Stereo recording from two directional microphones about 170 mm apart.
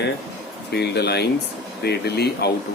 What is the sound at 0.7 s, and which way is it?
Speech, 75° left (ahead or behind).